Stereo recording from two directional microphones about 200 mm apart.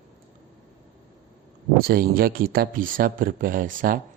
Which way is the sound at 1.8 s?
45° right (ahead or behind).